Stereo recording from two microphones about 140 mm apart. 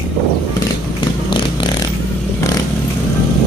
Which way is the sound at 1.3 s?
35° left (ahead or behind).